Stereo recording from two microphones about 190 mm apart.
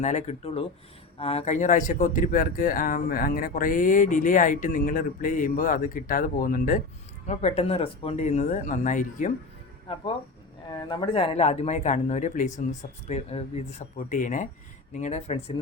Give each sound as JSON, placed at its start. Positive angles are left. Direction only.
{"t": 0.0, "sound": "speech", "side_deg": 40}
{"t": 7.3, "sound": "speech", "side_deg": 35}
{"t": 10.8, "sound": "speech", "side_deg": 25}